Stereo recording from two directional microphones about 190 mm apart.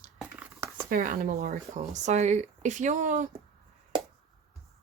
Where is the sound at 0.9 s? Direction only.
45° right (ahead or behind).